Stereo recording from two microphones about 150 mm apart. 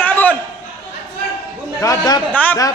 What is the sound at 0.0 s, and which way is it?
Chatter, 10° left (ahead or behind).